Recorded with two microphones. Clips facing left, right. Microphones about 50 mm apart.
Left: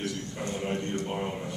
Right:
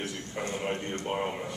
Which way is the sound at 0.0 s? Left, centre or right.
Right.